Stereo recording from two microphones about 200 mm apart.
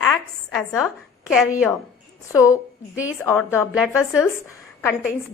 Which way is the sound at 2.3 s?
15° left (ahead or behind).